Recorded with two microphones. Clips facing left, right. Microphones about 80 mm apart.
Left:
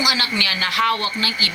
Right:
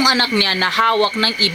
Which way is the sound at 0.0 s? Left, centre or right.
Right.